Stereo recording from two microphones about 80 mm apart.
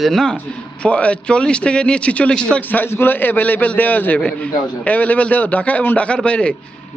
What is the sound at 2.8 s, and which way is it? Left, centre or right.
A man's voice, left.